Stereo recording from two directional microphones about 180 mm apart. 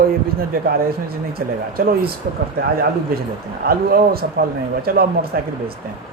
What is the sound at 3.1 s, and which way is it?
Speech, 55° right (ahead or behind).